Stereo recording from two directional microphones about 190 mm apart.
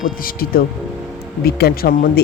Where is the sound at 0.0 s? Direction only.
50° left (ahead or behind).